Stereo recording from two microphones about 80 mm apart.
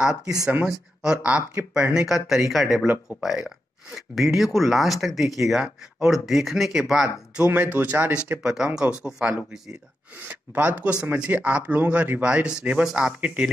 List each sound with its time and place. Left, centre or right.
0.7 s speech: centre
7.4 s speech: centre